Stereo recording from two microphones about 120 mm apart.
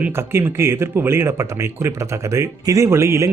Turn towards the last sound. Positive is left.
turn(degrees=-20)  # may be behind; listen again after turning